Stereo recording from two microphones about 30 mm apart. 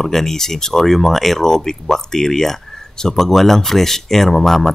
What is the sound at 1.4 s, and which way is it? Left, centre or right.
Speech, centre.